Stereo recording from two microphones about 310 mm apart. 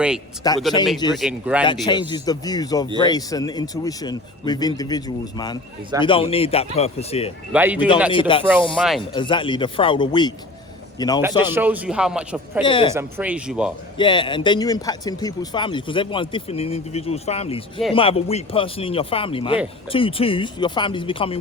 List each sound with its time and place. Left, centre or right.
0.4 s speech: centre
1.1 s a man's voice: centre
1.6 s speech: centre
7.5 s a man's voice: centre
8.1 s speech: centre
8.7 s a man's voice: centre
9.1 s a man's voice: centre
11.5 s a man's voice: centre
12.6 s speech: centre
12.9 s a man's voice: centre
14.0 s speech: centre